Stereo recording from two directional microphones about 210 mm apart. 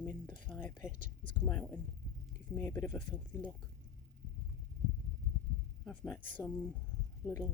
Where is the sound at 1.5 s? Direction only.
5° left (ahead or behind).